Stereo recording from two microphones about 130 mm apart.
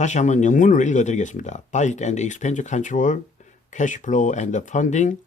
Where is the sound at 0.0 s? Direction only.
65° left (ahead or behind).